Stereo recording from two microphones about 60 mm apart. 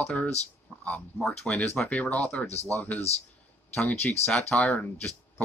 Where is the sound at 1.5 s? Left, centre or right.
Centre.